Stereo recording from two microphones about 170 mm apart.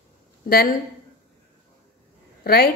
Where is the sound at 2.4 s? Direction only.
65° left (ahead or behind).